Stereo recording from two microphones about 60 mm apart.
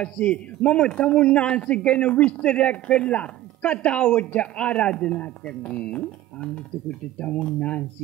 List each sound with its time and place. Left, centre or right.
0.0 s speech: centre